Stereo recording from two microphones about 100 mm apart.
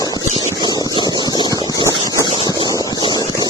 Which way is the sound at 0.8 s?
45° left (ahead or behind).